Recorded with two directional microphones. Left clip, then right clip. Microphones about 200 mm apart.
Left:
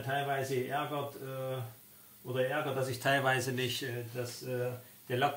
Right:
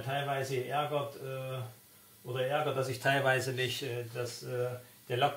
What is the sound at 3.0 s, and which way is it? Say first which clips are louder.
Speech: right 1 dB; 15° left (ahead or behind).